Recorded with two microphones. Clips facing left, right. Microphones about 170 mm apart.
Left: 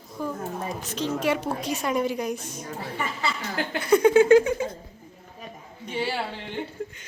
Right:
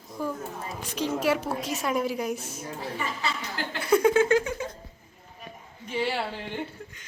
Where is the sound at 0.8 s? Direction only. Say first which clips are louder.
Right 2 dB; 10° right (ahead or behind).